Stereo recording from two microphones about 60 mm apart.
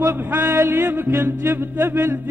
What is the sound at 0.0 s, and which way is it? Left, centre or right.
Music, right.